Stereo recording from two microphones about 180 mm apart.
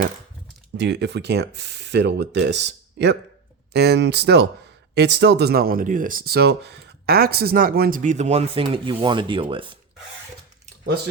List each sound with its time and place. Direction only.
0.8 s speech: 70° right (ahead or behind); by 9.7 s 30° right (ahead or behind)